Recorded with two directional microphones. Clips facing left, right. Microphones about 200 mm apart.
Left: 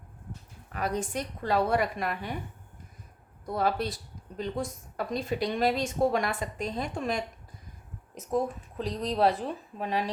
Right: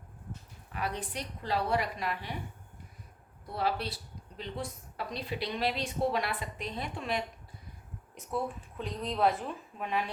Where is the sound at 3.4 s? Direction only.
45° left (ahead or behind).